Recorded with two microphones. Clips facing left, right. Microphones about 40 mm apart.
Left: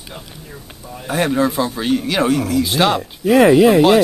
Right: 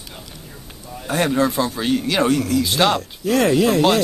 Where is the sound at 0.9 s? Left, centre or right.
Centre.